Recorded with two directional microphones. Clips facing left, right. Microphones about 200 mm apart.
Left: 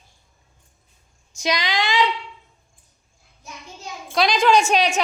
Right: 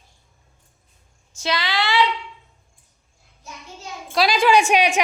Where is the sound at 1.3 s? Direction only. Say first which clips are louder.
Left 1 dB; 15° left (ahead or behind).